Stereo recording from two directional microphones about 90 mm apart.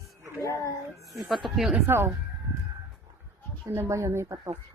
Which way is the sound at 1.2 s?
Centre (ahead or behind).